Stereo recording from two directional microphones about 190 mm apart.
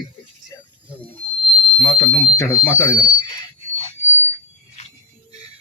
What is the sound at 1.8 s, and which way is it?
Speech, 25° left (ahead or behind).